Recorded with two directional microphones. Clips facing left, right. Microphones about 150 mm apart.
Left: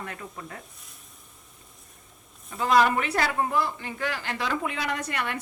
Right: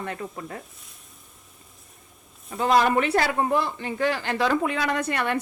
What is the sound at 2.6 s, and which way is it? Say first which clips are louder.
Speech: right 2 dB; 25° right (ahead or behind).